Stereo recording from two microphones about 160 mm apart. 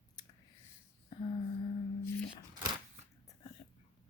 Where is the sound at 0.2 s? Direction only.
25° left (ahead or behind).